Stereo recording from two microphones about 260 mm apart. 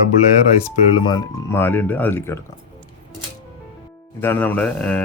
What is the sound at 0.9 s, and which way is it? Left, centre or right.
Speech, centre.